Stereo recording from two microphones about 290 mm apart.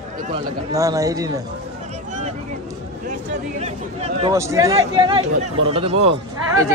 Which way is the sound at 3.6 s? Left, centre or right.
Right.